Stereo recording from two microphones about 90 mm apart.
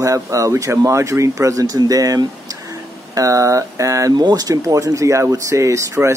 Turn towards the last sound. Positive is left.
turn(degrees=-35)  # may be behind; listen again after turning